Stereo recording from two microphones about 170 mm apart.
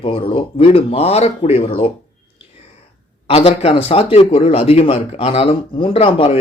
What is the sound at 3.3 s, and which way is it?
Speech, 35° left (ahead or behind).